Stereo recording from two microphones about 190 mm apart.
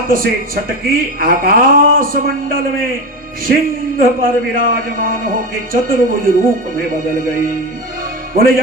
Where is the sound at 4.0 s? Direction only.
50° right (ahead or behind).